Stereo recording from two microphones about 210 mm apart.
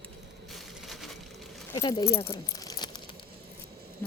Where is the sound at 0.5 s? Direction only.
Centre (ahead or behind).